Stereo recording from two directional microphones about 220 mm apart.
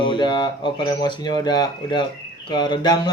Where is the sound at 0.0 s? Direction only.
20° left (ahead or behind).